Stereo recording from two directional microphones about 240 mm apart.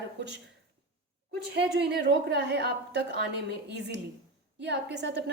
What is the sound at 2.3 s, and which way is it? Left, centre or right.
A woman's voice, right.